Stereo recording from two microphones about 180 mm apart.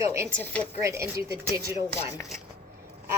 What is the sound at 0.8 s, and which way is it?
Speech, 15° right (ahead or behind).